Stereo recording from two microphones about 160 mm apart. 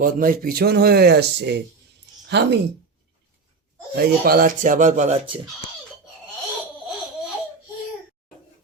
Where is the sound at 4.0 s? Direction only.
65° right (ahead or behind); by 5.1 s 50° right (ahead or behind).